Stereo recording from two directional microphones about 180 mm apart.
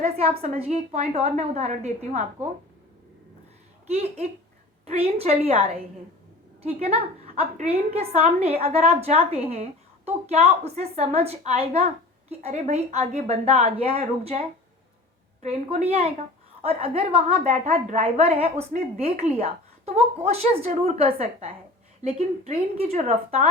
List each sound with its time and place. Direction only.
0.0 s a woman's voice: 35° right (ahead or behind)
3.8 s a woman's voice: 35° right (ahead or behind)